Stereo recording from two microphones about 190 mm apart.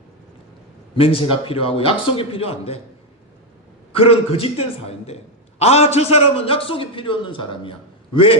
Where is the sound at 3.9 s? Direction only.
30° left (ahead or behind).